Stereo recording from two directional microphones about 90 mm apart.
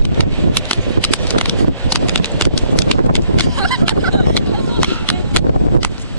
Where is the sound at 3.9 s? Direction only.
20° left (ahead or behind).